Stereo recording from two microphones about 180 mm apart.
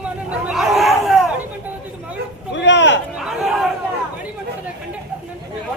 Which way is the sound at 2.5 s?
85° left.